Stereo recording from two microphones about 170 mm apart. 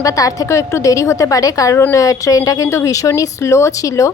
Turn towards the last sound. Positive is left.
turn(degrees=20)  # may be behind; listen again after turning